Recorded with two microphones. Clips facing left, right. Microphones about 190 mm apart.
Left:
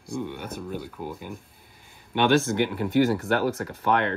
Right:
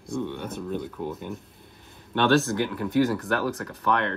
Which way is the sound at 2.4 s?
25° left (ahead or behind).